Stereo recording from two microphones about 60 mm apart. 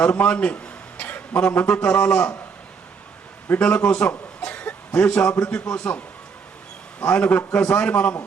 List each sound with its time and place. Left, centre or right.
0.0 s a man's voice: centre
3.6 s a man's voice: left
4.4 s a sound: centre
5.4 s a man's voice: centre
7.0 s a man's voice: left